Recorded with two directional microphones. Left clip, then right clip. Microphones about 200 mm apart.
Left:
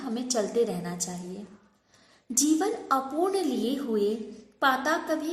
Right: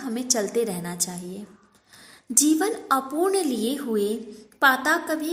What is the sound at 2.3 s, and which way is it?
A woman's voice, 35° right (ahead or behind).